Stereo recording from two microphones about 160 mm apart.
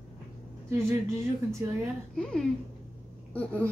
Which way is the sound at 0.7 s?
15° right (ahead or behind).